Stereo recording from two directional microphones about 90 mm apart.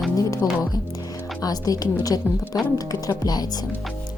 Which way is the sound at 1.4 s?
45° left (ahead or behind).